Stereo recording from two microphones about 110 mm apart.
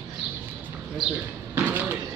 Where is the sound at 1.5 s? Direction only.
20° right (ahead or behind).